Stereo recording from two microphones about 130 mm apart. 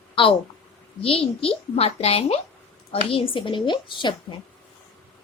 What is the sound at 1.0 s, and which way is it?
A woman's voice, 45° left (ahead or behind).